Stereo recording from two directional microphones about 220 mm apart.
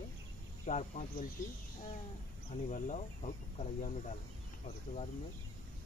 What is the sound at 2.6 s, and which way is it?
Speech, 35° left (ahead or behind).